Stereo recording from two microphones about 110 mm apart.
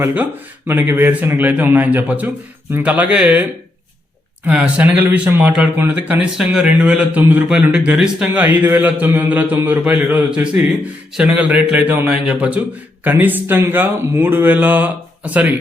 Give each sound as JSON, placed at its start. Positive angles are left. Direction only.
{"t": 0.0, "sound": "speech", "side_deg": -15}
{"t": 4.4, "sound": "speech", "side_deg": -10}